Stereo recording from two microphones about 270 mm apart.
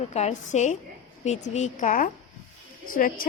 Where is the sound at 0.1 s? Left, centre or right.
Left.